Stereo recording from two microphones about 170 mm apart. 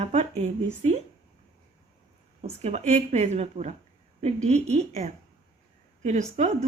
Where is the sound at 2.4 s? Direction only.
40° right (ahead or behind).